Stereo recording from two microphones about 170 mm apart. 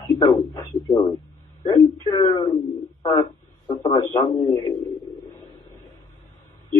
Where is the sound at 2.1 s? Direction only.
30° left (ahead or behind).